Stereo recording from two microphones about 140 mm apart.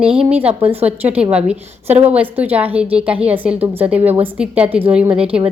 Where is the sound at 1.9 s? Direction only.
50° right (ahead or behind).